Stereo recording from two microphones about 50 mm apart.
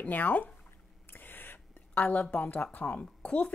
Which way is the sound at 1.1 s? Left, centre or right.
Left.